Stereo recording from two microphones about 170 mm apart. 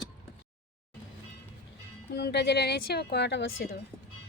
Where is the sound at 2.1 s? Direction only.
75° left (ahead or behind).